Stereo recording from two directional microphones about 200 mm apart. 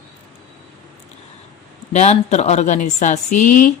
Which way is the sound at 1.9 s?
35° left (ahead or behind).